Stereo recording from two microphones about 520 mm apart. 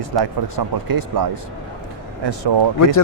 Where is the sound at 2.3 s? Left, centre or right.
Right.